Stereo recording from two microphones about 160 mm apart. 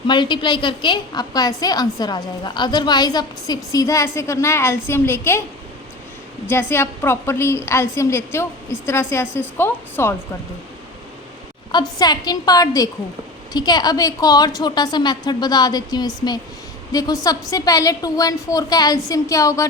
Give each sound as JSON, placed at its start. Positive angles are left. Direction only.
{"t": 0.1, "sound": "a woman's voice", "side_deg": 30}
{"t": 6.5, "sound": "a woman's voice", "side_deg": 15}
{"t": 11.7, "sound": "a woman's voice", "side_deg": 25}